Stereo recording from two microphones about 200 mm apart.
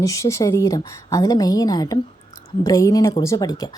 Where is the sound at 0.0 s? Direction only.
15° left (ahead or behind).